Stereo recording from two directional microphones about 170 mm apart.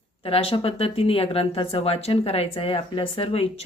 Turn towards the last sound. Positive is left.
turn(degrees=35)  # may be behind; listen again after turning